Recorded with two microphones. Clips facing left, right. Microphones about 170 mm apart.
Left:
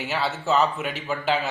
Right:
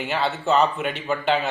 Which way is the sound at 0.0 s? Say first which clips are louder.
Right 2 dB; centre (ahead or behind).